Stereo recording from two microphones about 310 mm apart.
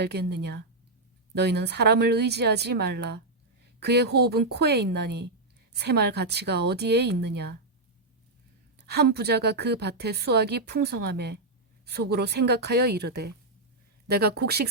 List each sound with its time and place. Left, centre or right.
0.0 s a woman's voice: right
8.9 s a woman's voice: right